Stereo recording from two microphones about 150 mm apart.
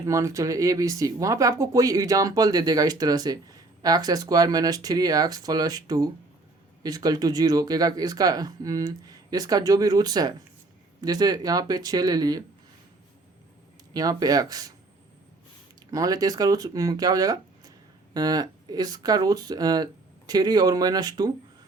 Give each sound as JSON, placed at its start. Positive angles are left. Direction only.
{"t": 0.0, "sound": "speech", "side_deg": -20}
{"t": 13.9, "sound": "speech", "side_deg": -25}
{"t": 15.9, "sound": "speech", "side_deg": -25}